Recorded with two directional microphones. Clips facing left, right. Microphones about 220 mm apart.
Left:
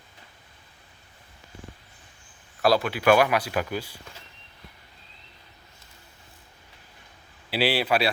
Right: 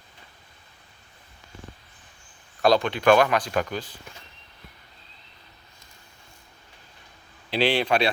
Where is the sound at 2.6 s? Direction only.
5° left (ahead or behind).